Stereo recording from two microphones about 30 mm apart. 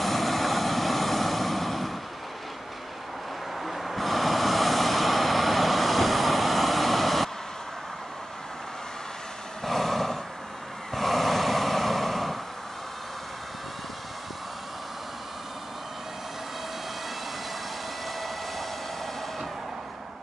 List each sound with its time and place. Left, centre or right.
0.0 s vehicle: centre
3.6 s vehicle: centre
9.7 s vehicle: centre
18.0 s hair dryer: centre